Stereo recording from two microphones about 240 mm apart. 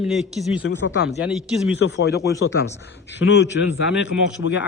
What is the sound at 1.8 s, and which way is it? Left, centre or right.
Speech, left.